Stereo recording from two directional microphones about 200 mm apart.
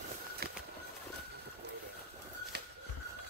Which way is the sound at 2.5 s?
55° right (ahead or behind).